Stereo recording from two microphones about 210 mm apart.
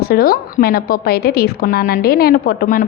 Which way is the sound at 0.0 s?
45° left (ahead or behind).